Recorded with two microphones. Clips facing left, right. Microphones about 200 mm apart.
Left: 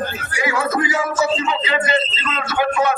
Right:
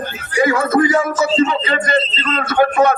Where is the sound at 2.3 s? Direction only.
55° right (ahead or behind).